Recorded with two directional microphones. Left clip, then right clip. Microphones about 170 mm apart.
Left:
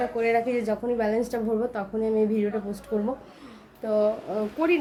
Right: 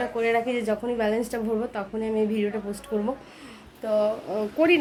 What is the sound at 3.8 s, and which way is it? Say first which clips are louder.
Speech: even; centre (ahead or behind).